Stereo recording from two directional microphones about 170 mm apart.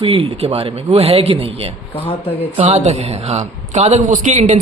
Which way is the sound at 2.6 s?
40° right (ahead or behind).